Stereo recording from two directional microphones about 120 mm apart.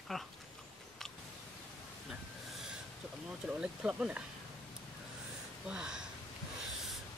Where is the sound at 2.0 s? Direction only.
5° right (ahead or behind).